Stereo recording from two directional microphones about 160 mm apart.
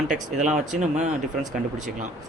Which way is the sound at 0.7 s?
50° right (ahead or behind).